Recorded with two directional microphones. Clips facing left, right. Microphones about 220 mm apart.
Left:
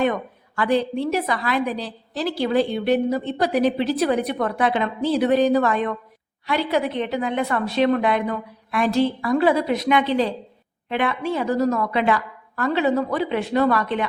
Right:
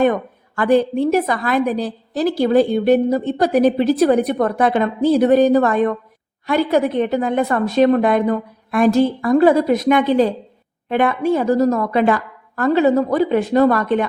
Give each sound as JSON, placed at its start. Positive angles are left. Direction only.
{"t": 0.0, "sound": "a woman's voice", "side_deg": -45}